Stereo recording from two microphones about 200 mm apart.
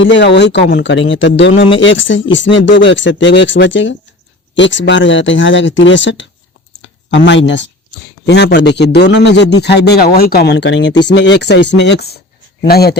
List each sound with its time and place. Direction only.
0.0 s a man's voice: 65° left (ahead or behind)